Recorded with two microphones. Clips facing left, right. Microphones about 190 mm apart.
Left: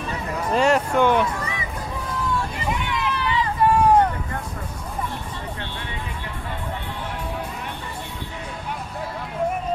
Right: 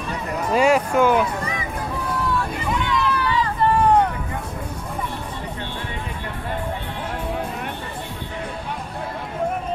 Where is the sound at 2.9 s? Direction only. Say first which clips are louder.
Right 4 dB; 15° left (ahead or behind).